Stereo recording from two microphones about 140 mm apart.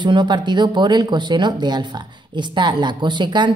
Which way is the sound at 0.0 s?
35° right (ahead or behind).